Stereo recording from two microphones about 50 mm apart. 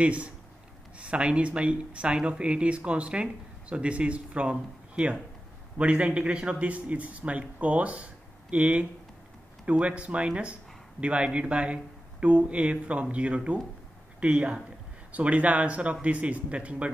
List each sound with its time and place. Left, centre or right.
0.0 s speech: right